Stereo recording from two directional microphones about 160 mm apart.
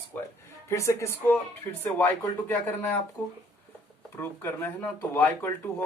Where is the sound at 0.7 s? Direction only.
20° left (ahead or behind).